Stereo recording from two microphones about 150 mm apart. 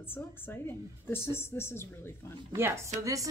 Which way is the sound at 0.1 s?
15° left (ahead or behind).